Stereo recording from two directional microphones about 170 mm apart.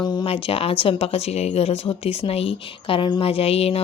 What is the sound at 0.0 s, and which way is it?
Speech, 25° left (ahead or behind).